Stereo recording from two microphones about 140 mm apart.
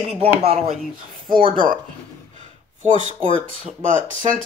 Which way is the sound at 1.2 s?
35° right (ahead or behind).